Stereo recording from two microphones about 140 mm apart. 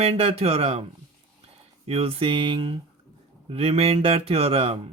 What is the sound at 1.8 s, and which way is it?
Speech, 45° right (ahead or behind).